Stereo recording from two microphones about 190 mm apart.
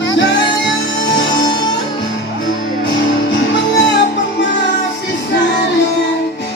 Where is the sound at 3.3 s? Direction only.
65° left (ahead or behind).